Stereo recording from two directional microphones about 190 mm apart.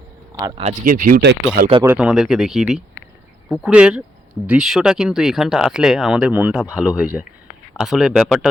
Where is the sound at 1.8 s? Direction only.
5° right (ahead or behind).